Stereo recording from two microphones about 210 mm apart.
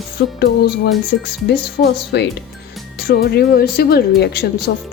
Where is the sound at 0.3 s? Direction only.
50° left (ahead or behind).